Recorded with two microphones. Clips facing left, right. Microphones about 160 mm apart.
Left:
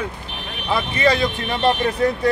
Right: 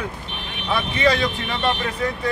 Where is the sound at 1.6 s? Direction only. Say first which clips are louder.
Left 6 dB; 35° left (ahead or behind).